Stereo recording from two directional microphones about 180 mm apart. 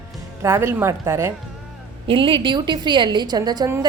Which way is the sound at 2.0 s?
30° right (ahead or behind).